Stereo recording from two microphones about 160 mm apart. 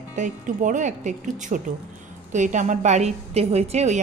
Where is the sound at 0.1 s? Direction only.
50° right (ahead or behind).